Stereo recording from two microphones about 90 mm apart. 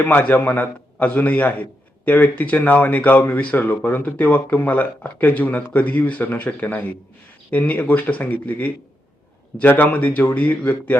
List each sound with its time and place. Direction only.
0.0 s a man's voice: 20° left (ahead or behind)